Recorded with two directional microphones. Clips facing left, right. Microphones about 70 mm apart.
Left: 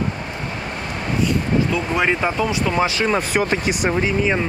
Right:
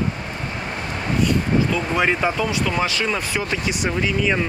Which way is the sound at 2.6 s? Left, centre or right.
Left.